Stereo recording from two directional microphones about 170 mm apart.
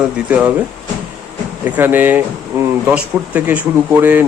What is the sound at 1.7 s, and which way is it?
Speech, 10° right (ahead or behind).